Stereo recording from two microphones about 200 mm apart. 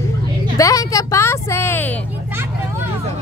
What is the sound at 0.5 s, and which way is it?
A woman's voice, 15° left (ahead or behind).